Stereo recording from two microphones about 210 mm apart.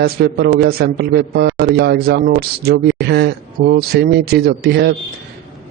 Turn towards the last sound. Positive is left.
turn(degrees=-50)  # may be behind; listen again after turning